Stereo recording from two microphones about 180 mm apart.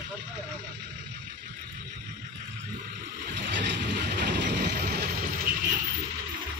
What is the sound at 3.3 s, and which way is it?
Vehicle, 75° right (ahead or behind).